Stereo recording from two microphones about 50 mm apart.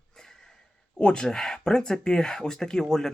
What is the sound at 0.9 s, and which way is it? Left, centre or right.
Speech, centre.